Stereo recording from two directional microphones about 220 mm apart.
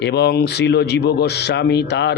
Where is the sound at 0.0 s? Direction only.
50° left (ahead or behind).